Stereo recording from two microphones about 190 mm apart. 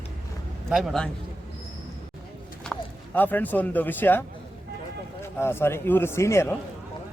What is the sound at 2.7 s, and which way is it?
Clip-clop, centre (ahead or behind).